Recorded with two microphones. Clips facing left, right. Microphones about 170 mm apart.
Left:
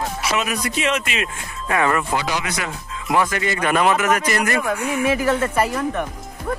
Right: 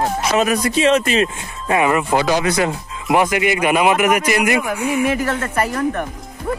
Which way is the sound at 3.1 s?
20° right (ahead or behind).